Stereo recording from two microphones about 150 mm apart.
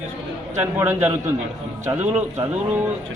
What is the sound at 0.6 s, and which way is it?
Speech, 15° right (ahead or behind).